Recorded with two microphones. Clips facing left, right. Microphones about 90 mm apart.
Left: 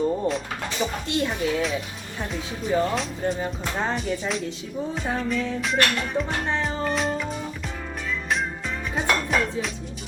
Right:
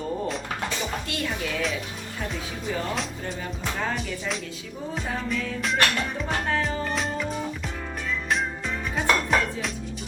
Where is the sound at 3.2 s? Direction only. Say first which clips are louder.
Left 5 dB; 30° left (ahead or behind).